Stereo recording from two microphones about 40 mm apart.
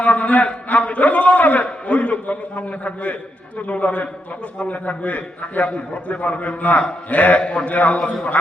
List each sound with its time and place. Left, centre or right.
0.0 s a man's voice: left